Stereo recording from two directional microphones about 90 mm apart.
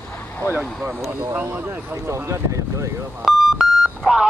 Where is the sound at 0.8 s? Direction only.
20° right (ahead or behind).